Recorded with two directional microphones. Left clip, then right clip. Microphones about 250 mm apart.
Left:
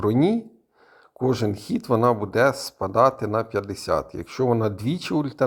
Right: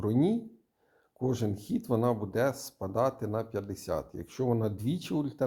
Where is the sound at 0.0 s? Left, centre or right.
Centre.